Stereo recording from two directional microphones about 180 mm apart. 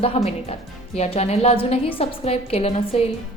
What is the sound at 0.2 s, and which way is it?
A woman's voice, 35° left (ahead or behind).